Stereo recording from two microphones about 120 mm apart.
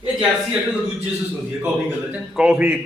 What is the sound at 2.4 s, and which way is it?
Speech, 5° right (ahead or behind).